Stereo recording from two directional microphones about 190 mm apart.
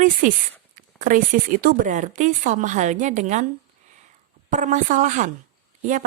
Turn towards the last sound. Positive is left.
turn(degrees=-40)  # may be behind; listen again after turning